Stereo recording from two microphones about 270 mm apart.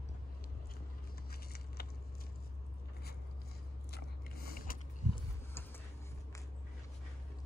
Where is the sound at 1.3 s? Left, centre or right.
Left.